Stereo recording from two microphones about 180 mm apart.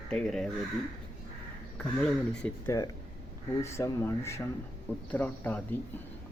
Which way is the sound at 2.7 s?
15° left (ahead or behind).